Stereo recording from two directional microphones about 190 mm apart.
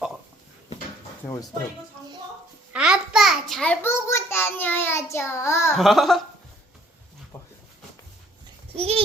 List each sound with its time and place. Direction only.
2.7 s a sound: 5° right (ahead or behind); by 5.7 s 15° left (ahead or behind)
5.7 s speech: centre (ahead or behind)
8.7 s speech: 30° right (ahead or behind)